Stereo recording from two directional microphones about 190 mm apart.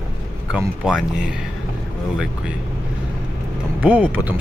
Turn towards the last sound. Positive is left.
turn(degrees=-10)  # may be behind; listen again after turning